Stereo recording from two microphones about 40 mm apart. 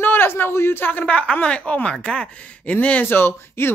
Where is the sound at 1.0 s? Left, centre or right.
Left.